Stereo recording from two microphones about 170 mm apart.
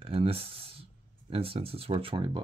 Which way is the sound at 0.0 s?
35° right (ahead or behind).